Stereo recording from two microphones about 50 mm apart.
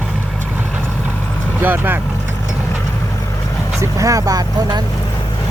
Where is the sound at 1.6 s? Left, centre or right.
Right.